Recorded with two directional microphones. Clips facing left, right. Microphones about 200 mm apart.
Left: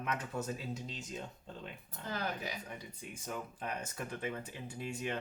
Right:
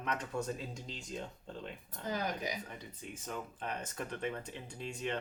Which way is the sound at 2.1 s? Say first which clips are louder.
Right 2 dB; 15° right (ahead or behind).